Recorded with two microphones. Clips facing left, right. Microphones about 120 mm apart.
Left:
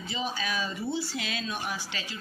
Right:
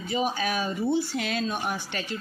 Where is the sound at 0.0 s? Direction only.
50° right (ahead or behind).